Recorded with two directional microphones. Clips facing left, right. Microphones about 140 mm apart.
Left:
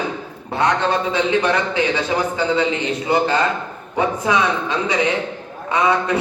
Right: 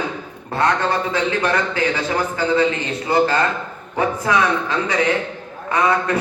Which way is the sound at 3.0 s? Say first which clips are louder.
Right 1 dB; 20° left (ahead or behind).